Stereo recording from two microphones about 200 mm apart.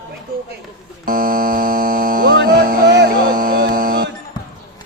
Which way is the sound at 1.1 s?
45° right (ahead or behind).